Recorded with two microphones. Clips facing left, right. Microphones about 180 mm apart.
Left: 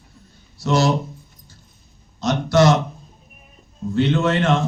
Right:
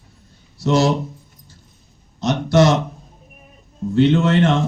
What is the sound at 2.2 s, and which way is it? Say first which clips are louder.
Speech: right 1 dB; 25° right (ahead or behind).